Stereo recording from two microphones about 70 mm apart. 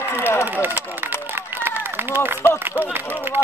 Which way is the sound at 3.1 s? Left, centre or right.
Right.